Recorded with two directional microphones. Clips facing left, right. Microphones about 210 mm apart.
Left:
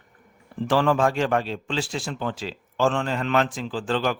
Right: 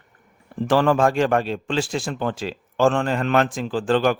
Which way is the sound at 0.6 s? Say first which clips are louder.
Right 3 dB; 50° right (ahead or behind).